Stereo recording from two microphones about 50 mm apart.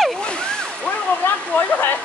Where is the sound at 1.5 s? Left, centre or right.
Left.